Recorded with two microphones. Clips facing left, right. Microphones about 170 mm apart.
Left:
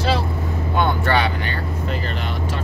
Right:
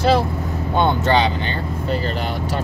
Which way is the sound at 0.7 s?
20° right (ahead or behind).